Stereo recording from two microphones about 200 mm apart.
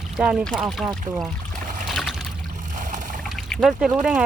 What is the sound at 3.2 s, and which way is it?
Speech, centre (ahead or behind).